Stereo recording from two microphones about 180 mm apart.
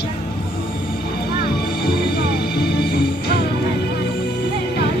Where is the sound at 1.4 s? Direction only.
60° left (ahead or behind).